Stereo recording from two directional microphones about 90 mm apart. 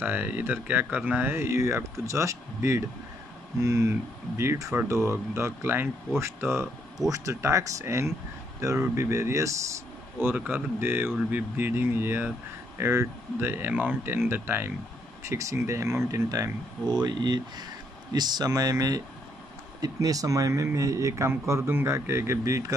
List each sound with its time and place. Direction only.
0.0 s speech: 20° right (ahead or behind); by 16.4 s 40° right (ahead or behind)
16.8 s speech: 55° right (ahead or behind); by 22.8 s 35° right (ahead or behind)